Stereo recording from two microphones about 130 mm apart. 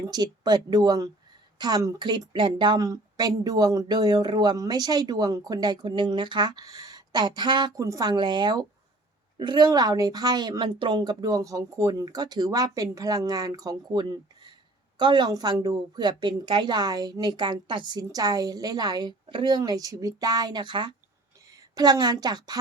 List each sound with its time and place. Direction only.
0.1 s a woman's voice: 35° right (ahead or behind)